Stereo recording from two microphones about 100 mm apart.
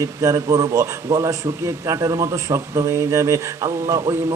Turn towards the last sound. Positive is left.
turn(degrees=-30)  # may be behind; listen again after turning